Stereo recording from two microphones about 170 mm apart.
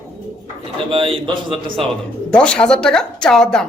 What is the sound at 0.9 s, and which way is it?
Speech, 30° right (ahead or behind).